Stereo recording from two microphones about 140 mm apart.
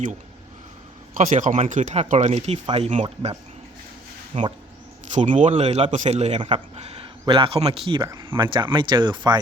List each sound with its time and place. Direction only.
1.1 s a man's voice: 65° right (ahead or behind); by 3.3 s 50° right (ahead or behind)
4.3 s speech: 40° right (ahead or behind)
5.1 s a man's voice: 60° right (ahead or behind); by 9.4 s 30° right (ahead or behind)